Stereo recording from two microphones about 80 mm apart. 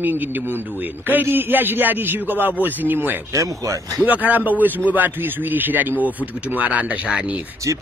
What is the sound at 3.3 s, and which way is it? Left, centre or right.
Speech, right.